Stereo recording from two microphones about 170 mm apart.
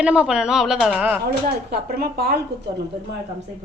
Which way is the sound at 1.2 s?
65° right (ahead or behind).